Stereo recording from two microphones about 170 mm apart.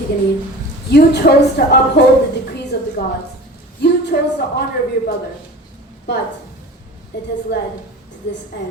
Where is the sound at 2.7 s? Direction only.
75° left (ahead or behind).